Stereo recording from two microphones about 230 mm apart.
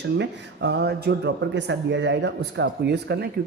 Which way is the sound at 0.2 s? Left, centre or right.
Right.